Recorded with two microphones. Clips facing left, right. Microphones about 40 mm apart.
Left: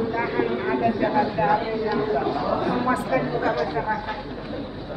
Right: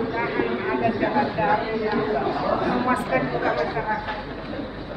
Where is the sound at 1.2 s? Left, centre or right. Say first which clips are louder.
Even; right.